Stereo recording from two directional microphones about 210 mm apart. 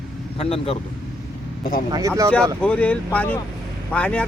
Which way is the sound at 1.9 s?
15° right (ahead or behind).